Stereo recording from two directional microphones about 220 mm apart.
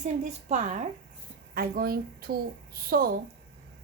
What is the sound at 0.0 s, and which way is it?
Speech, 30° right (ahead or behind).